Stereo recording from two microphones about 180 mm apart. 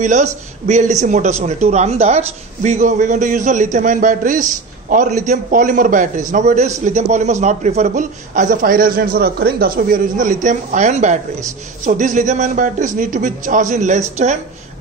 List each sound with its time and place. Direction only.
0.0 s a man's voice: 40° right (ahead or behind)